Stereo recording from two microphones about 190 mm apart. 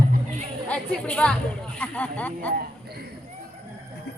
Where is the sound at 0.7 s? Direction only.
5° left (ahead or behind).